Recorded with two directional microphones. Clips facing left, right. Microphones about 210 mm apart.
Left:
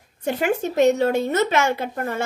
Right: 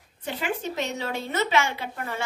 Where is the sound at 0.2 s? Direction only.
45° left (ahead or behind).